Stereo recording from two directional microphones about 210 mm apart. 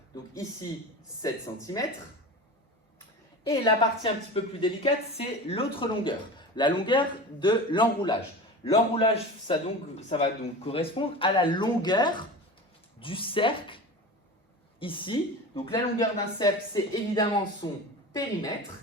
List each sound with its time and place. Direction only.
0.1 s speech: 15° left (ahead or behind)
3.5 s a man's voice: 25° left (ahead or behind)